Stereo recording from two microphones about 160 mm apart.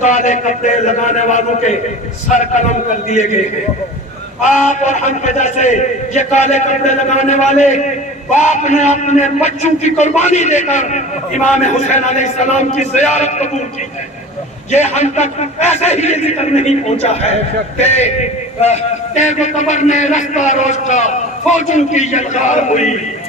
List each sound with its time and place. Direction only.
0.0 s a man's voice: 50° left (ahead or behind)
14.7 s a man's voice: 45° left (ahead or behind)